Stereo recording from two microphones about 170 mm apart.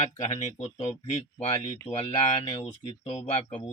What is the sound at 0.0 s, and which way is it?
Speech, 45° left (ahead or behind).